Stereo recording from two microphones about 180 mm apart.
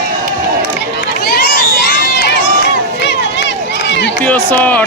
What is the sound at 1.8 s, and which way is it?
Run, 75° left (ahead or behind).